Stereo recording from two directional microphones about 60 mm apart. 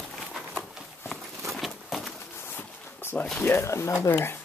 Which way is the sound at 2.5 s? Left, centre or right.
Left.